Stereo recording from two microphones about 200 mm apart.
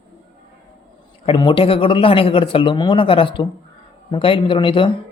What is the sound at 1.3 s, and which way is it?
Speech, 25° left (ahead or behind).